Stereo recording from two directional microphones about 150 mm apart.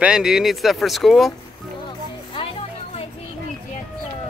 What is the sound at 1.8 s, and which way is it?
Music, 35° left (ahead or behind).